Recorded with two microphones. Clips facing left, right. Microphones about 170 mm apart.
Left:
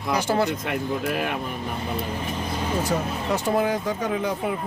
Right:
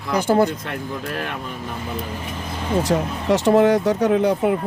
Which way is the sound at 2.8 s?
90° right.